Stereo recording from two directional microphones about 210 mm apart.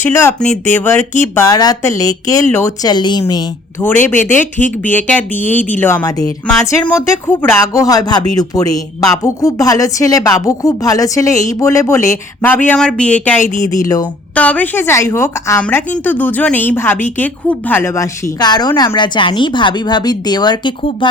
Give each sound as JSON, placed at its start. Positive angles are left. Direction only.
{"t": 0.0, "sound": "speech", "side_deg": 10}
{"t": 1.2, "sound": "speech", "side_deg": 15}
{"t": 4.3, "sound": "speech", "side_deg": 10}
{"t": 13.4, "sound": "speech", "side_deg": 35}
{"t": 13.8, "sound": "speech", "side_deg": 15}
{"t": 14.3, "sound": "speech", "side_deg": 5}